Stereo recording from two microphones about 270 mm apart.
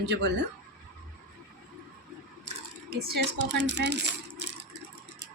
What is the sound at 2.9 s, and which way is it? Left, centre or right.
Speech, right.